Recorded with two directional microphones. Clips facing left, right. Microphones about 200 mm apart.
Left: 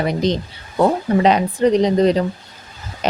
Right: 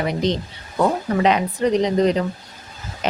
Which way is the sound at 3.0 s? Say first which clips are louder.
Left 3 dB; 35° left (ahead or behind).